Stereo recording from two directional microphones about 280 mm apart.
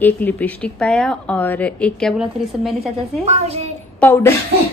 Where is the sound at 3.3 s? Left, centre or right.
Right.